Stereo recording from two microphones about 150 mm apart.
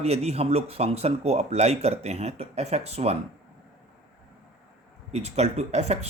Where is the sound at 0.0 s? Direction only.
45° right (ahead or behind).